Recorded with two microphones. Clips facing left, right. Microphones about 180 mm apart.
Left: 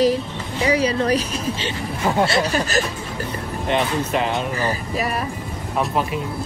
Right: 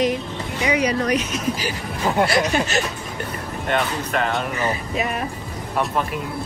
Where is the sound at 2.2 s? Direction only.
30° left (ahead or behind).